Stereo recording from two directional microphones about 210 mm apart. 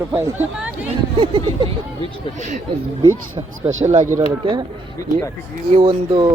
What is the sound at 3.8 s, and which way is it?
Speech, 35° right (ahead or behind).